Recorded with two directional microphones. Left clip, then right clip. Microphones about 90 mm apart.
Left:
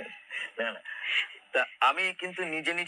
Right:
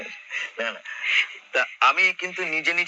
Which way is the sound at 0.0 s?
25° right (ahead or behind).